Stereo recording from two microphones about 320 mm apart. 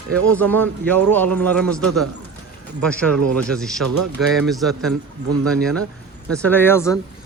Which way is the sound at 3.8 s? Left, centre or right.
Right.